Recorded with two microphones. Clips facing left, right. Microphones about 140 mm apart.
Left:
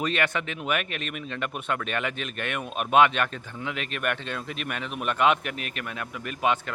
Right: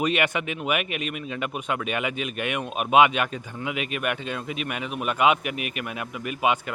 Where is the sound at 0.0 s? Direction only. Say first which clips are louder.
Right 3 dB; 15° right (ahead or behind).